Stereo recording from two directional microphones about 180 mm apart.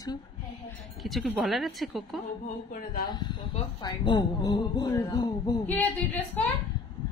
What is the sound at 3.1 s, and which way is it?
A woman's voice, 25° left (ahead or behind).